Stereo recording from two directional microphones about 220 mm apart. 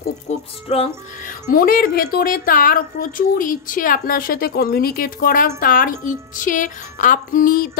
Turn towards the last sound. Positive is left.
turn(degrees=40)  # may be behind; listen again after turning